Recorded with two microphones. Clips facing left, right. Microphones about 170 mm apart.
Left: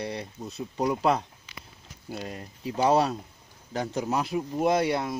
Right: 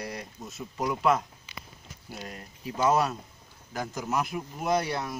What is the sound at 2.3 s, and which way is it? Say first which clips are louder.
Speech: left 4 dB; 25° left (ahead or behind).